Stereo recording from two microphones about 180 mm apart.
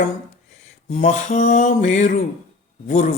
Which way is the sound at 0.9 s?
45° left (ahead or behind).